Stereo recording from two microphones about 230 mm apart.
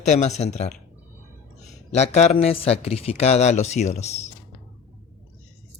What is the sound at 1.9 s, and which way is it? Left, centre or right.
A man's voice, left.